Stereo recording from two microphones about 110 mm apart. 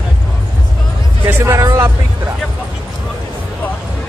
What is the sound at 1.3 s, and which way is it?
Speech, 25° right (ahead or behind).